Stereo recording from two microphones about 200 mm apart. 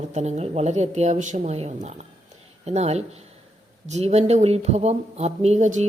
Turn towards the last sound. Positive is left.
turn(degrees=-35)  # may be behind; listen again after turning